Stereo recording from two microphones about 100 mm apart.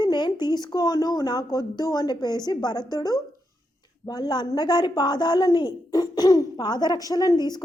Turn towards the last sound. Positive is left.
turn(degrees=40)  # may be behind; listen again after turning